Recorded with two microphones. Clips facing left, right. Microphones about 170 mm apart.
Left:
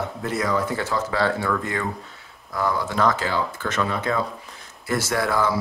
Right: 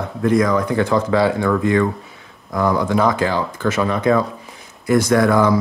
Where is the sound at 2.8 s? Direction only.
15° right (ahead or behind).